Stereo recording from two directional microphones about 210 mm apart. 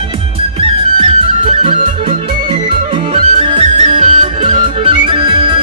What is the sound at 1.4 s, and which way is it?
Music, 30° right (ahead or behind).